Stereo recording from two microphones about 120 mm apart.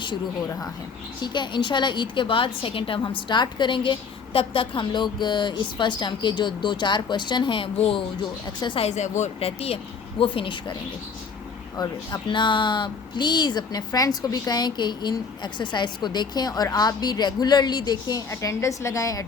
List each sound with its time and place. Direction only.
1.2 s a woman's voice: 40° left (ahead or behind)
8.8 s a woman's voice: 70° left (ahead or behind); by 10.6 s 45° left (ahead or behind)
11.8 s a woman's voice: 40° left (ahead or behind)